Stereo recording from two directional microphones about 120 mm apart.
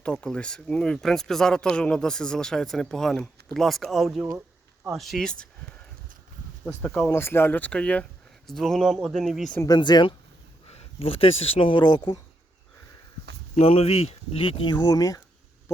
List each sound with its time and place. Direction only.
0.0 s speech: 5° left (ahead or behind)
6.8 s speech: 5° left (ahead or behind)
7.1 s speech: 20° left (ahead or behind); by 9.6 s centre (ahead or behind)
9.6 s speech: 35° left (ahead or behind)
10.7 s speech: 55° left (ahead or behind); by 12.2 s 35° left (ahead or behind)
13.6 s speech: 55° left (ahead or behind); by 15.2 s 30° left (ahead or behind)